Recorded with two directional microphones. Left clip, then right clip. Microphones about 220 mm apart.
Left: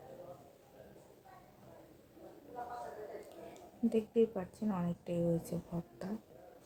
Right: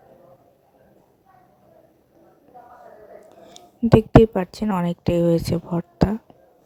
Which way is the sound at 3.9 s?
45° right (ahead or behind).